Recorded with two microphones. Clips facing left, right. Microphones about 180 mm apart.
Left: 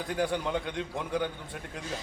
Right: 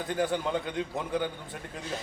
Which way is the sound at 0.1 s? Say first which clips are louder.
Right 1 dB; centre (ahead or behind).